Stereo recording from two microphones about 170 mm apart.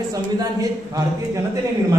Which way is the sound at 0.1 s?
20° right (ahead or behind).